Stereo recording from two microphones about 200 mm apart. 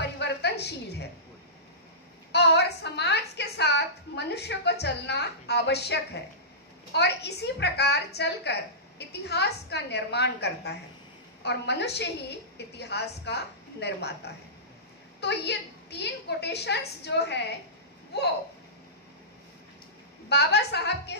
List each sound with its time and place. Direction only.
0.0 s a sound: 55° left (ahead or behind)
2.3 s a woman's voice: 55° left (ahead or behind)
20.2 s a woman's voice: 55° left (ahead or behind)